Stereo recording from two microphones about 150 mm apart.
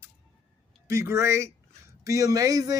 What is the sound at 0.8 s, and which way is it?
Speech, 20° right (ahead or behind).